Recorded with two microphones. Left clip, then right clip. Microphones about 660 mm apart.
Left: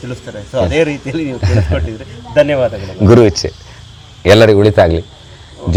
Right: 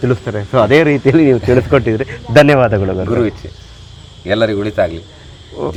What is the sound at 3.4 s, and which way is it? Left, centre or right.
A man's voice, left.